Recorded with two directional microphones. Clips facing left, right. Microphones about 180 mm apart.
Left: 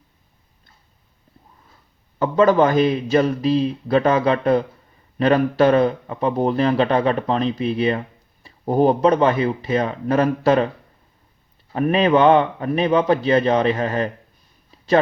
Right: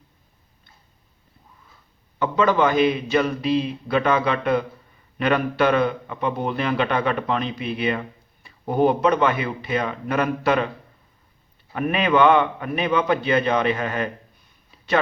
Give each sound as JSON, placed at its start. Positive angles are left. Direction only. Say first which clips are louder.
{"t": 2.1, "sound": "speech", "louder": "left 5 dB", "side_deg": 40}
{"t": 11.7, "sound": "speech", "louder": "left 4 dB", "side_deg": 35}